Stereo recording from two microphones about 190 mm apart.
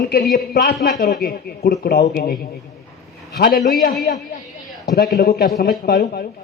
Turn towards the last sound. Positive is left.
turn(degrees=55)  # may be behind; listen again after turning